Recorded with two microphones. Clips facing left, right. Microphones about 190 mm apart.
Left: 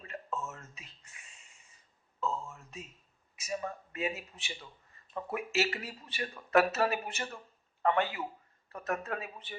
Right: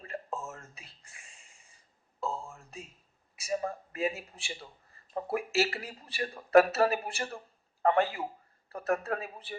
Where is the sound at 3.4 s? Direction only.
35° right (ahead or behind).